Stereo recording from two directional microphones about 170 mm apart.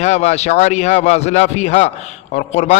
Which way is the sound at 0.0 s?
40° left (ahead or behind).